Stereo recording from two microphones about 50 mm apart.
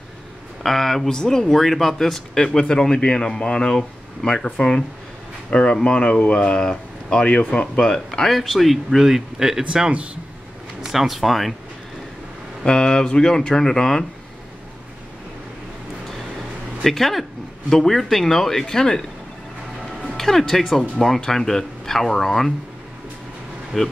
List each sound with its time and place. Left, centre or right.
0.7 s speech: centre
10.8 s speech: centre
12.6 s speech: centre
16.8 s speech: centre
20.2 s speech: centre
23.7 s speech: centre